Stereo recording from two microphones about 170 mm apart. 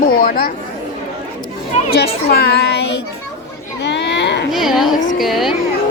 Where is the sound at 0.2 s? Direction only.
55° left (ahead or behind).